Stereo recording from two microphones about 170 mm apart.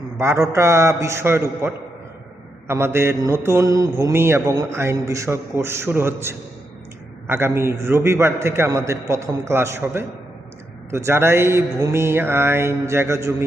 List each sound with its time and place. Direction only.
0.2 s mantra: 15° right (ahead or behind)